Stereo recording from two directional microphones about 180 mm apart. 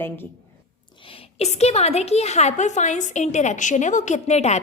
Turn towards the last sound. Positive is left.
turn(degrees=40)  # may be behind; listen again after turning